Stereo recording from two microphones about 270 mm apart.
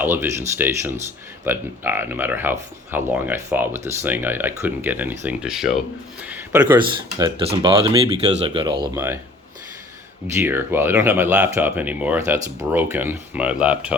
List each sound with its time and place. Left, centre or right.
0.0 s speech: centre
10.3 s speech: centre